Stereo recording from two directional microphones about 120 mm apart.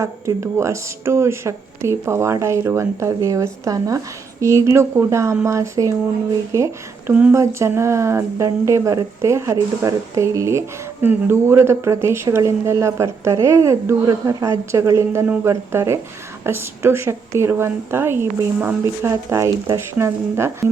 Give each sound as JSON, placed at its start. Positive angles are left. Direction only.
{"t": 0.0, "sound": "speech", "side_deg": -25}